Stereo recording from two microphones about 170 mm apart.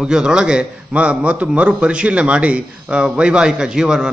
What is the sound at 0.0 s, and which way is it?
A man's voice, 5° right (ahead or behind).